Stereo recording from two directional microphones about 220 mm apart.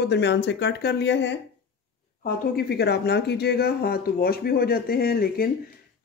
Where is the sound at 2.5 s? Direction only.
50° left (ahead or behind).